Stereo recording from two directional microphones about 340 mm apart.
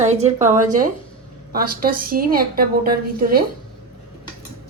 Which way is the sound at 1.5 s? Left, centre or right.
Right.